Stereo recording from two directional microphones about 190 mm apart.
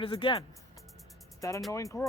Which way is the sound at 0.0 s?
25° left (ahead or behind).